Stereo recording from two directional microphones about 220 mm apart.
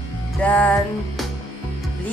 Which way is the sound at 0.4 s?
5° left (ahead or behind).